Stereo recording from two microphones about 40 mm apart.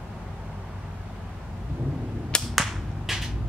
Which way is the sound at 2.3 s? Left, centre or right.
Left.